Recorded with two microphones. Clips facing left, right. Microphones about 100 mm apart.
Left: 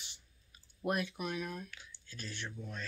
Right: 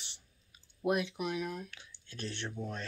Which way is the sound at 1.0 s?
15° right (ahead or behind).